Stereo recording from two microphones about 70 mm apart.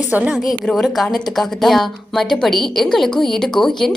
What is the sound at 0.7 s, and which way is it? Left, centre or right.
Speech, centre.